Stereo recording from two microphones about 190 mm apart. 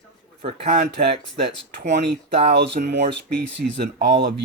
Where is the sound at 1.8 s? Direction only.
65° right (ahead or behind).